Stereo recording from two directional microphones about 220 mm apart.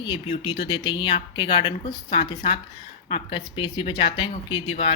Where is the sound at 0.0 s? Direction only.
25° left (ahead or behind).